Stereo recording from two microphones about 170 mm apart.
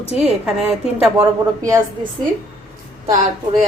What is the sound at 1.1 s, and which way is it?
Speech, 20° right (ahead or behind).